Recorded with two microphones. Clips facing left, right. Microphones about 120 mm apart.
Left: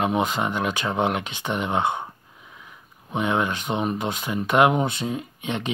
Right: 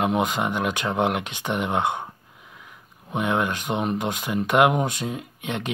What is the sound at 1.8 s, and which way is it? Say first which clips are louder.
Speech: left 2 dB; 15° left (ahead or behind).